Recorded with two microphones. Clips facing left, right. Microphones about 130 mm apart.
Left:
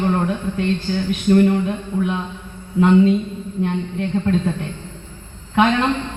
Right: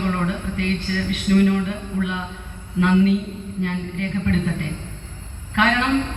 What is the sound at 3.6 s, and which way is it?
Speech, 30° left (ahead or behind).